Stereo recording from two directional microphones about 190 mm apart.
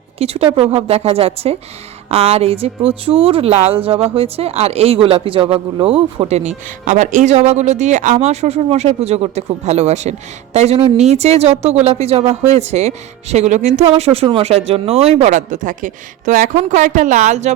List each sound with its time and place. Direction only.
0.2 s speech: 30° right (ahead or behind)